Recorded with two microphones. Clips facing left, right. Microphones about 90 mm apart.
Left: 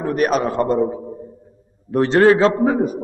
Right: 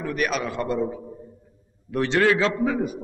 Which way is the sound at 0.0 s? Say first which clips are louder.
Left 8 dB; 40° left (ahead or behind).